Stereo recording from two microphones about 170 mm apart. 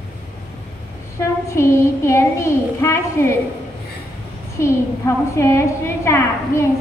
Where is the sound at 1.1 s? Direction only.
15° left (ahead or behind).